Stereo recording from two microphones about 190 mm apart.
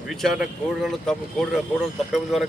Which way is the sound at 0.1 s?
Centre (ahead or behind).